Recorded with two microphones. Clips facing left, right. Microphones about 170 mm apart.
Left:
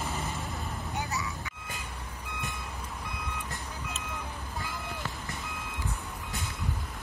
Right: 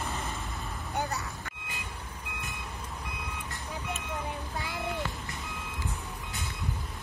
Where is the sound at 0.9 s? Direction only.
55° right (ahead or behind).